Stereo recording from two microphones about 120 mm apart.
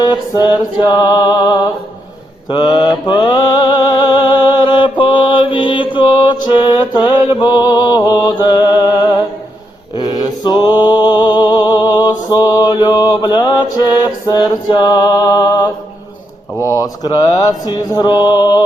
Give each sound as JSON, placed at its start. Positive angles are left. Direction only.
{"t": 0.0, "sound": "music", "side_deg": 40}
{"t": 2.5, "sound": "mantra", "side_deg": 40}
{"t": 13.7, "sound": "music", "side_deg": 35}
{"t": 16.6, "sound": "speech", "side_deg": 30}
{"t": 17.7, "sound": "music", "side_deg": 35}